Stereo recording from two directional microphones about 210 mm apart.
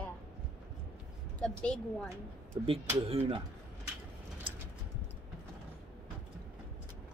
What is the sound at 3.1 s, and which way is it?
Speech, 25° right (ahead or behind).